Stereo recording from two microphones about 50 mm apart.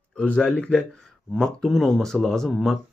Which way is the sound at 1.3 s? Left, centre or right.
Centre.